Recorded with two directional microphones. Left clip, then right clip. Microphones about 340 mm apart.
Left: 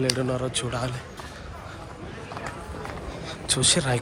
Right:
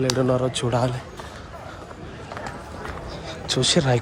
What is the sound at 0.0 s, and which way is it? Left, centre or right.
Speech, centre.